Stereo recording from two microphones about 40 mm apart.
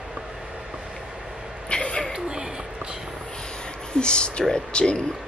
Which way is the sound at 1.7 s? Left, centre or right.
Left.